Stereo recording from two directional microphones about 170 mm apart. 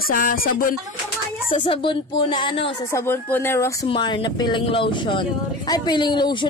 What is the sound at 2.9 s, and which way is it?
Speech, 15° left (ahead or behind).